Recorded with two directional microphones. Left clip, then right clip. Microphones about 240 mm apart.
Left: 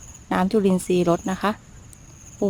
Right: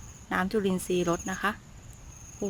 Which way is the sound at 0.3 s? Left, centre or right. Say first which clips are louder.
Left 7 dB; centre.